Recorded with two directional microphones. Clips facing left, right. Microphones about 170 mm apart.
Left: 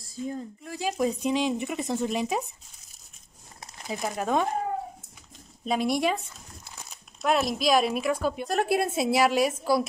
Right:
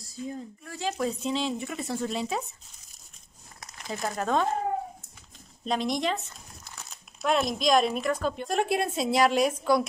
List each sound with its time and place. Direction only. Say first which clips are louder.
0.7 s speech: left 3 dB; 15° left (ahead or behind)
3.9 s speech: left 1 dB; 10° left (ahead or behind)
5.7 s a woman's voice: left 2 dB; 10° left (ahead or behind)